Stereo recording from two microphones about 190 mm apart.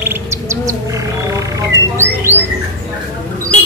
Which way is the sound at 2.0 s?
10° right (ahead or behind).